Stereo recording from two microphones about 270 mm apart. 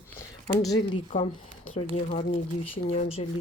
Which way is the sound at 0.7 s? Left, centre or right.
Centre.